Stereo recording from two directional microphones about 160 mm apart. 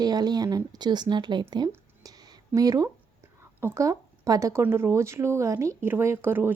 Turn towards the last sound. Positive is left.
turn(degrees=-15)  # may be behind; listen again after turning